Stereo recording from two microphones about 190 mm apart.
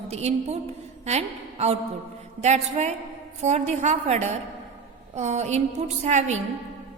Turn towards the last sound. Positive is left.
turn(degrees=-35)  # may be behind; listen again after turning